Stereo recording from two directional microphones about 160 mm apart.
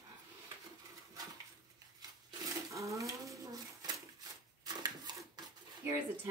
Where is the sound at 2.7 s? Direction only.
20° right (ahead or behind).